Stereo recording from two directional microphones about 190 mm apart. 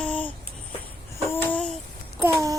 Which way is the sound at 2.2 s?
15° right (ahead or behind).